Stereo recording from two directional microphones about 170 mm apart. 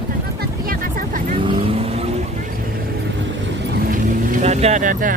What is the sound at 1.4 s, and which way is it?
Vehicle, 30° right (ahead or behind).